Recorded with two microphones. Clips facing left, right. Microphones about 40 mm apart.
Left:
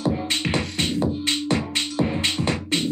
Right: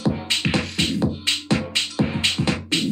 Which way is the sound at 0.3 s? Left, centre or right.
Right.